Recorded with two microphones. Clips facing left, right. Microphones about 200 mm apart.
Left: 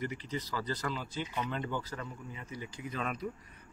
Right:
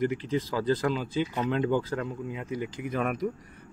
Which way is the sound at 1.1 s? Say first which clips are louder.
Right 9 dB; 85° right.